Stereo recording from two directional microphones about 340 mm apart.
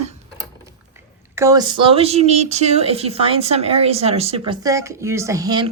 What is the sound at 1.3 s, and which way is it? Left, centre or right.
Speech, centre.